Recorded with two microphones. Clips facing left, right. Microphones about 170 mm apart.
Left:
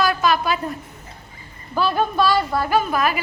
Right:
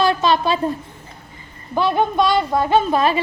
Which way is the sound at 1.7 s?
20° right (ahead or behind).